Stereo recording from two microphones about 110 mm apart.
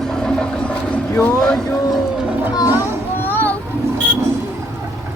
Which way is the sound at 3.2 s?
15° left (ahead or behind).